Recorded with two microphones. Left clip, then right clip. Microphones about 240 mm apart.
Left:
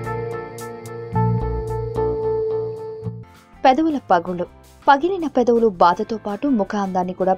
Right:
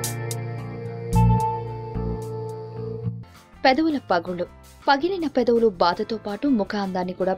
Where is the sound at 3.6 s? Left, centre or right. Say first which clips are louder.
Left 4 dB; centre.